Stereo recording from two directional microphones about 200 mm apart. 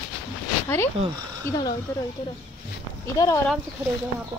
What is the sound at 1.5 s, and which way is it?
Speech, 10° left (ahead or behind).